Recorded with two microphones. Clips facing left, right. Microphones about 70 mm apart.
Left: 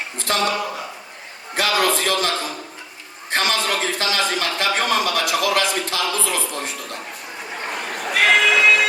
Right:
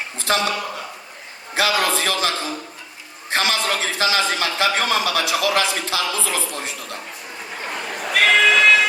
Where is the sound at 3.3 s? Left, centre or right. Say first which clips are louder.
Even; centre.